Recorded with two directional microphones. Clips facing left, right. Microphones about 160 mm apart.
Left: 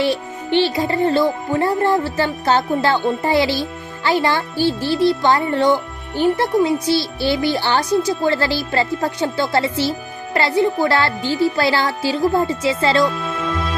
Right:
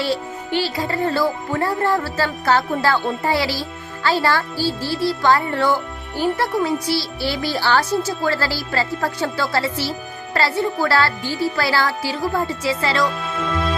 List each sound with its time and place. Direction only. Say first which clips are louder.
0.0 s speech: left 3 dB; 20° left (ahead or behind)